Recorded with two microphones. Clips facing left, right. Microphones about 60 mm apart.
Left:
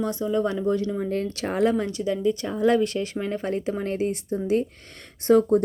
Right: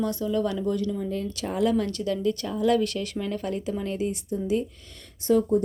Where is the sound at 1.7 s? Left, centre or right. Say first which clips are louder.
Left 1 dB; centre.